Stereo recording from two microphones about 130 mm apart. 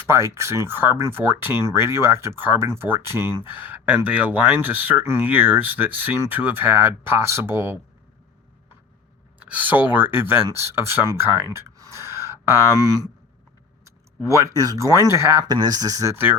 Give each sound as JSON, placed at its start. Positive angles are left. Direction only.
{"t": 0.1, "sound": "speech", "side_deg": -20}
{"t": 9.4, "sound": "speech", "side_deg": -10}
{"t": 13.8, "sound": "speech", "side_deg": -25}